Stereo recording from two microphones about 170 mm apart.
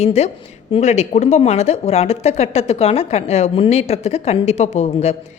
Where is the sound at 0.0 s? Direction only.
40° left (ahead or behind).